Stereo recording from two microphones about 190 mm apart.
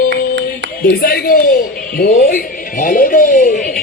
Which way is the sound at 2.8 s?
45° left (ahead or behind).